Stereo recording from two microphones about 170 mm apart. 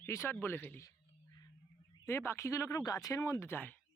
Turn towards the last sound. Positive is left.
turn(degrees=15)  # may be behind; listen again after turning